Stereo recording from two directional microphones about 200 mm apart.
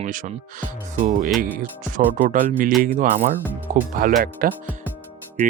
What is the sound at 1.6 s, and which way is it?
Speech, 40° right (ahead or behind).